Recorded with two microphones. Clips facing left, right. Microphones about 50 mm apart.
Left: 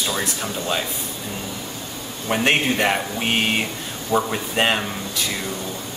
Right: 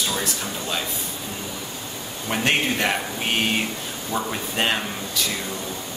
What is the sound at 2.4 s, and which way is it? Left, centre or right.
Speech, centre.